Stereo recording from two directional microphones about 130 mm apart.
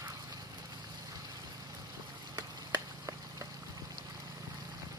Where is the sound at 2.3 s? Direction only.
25° right (ahead or behind).